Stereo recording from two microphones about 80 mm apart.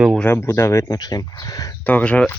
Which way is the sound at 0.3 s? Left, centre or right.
Left.